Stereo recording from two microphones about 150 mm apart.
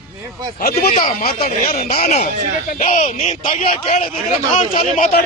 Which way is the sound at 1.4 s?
40° left (ahead or behind).